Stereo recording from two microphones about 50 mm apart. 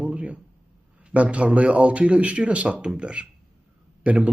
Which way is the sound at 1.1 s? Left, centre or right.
Right.